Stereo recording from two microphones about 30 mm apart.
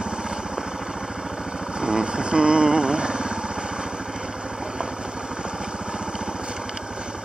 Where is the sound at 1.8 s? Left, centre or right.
Right.